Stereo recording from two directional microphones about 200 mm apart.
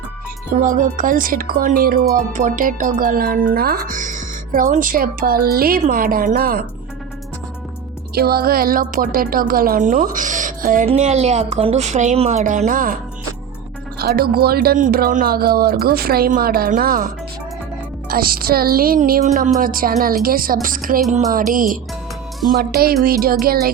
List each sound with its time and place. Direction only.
0.5 s speech: 40° right (ahead or behind)
8.1 s speech: 50° right (ahead or behind)
14.0 s speech: 50° right (ahead or behind)
18.1 s speech: 45° right (ahead or behind)